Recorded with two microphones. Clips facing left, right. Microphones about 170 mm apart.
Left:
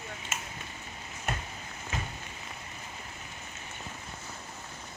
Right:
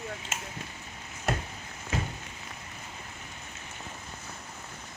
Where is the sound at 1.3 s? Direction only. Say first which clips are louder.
Right 5 dB; 90° right.